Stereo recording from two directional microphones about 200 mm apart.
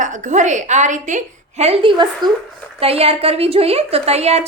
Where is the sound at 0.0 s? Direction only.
35° right (ahead or behind).